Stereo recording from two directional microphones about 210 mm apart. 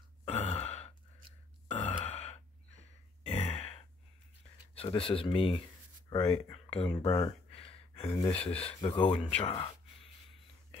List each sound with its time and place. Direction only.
0.2 s gasp: 30° left (ahead or behind)
2.0 s sigh: 30° left (ahead or behind)
3.3 s sigh: 30° left (ahead or behind)
4.7 s speech: 25° left (ahead or behind)
6.0 s a sound: 25° left (ahead or behind)
6.3 s speech: 15° left (ahead or behind)
6.6 s a sound: 30° left (ahead or behind)
7.0 s speech: 20° left (ahead or behind)